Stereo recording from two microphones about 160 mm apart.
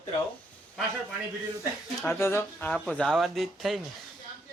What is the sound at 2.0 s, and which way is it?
Speech, 15° left (ahead or behind).